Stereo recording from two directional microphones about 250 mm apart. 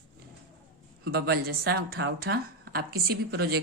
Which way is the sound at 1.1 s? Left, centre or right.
Right.